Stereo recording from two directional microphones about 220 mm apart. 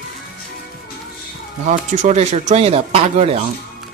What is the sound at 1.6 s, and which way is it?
Speech, 35° right (ahead or behind).